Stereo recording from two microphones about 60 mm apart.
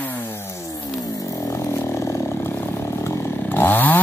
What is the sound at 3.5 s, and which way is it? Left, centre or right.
Chainsaw, left.